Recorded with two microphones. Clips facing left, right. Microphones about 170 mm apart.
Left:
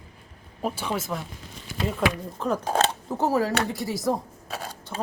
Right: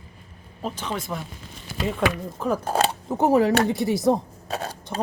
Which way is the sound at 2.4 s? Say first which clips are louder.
Right 1 dB; 10° right (ahead or behind).